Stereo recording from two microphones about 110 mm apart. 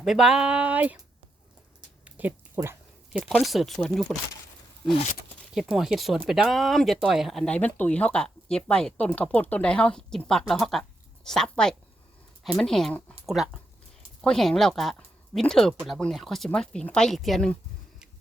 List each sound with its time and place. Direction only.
0.0 s speech: 5° right (ahead or behind)
2.0 s a sound: 15° right (ahead or behind)
2.6 s speech: 20° right (ahead or behind)
3.1 s speech: 5° right (ahead or behind)
5.5 s speech: 5° right (ahead or behind)
7.5 s speech: 15° left (ahead or behind)